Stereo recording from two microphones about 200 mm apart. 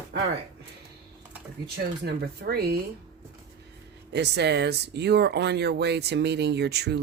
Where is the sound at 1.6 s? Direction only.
50° right (ahead or behind).